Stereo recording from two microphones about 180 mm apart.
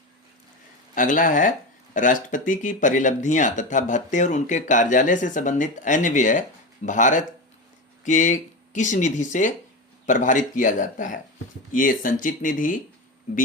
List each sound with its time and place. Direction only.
0.9 s speech: 50° left (ahead or behind)